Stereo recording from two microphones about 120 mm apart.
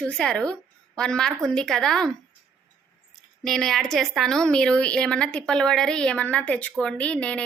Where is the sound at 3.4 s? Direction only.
Centre (ahead or behind).